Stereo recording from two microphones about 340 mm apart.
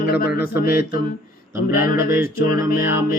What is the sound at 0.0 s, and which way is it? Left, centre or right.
Speech, left.